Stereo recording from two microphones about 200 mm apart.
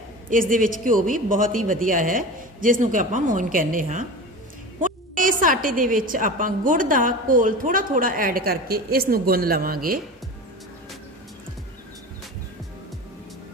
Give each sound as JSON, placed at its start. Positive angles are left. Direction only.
{"t": 0.3, "sound": "a woman's voice", "side_deg": -40}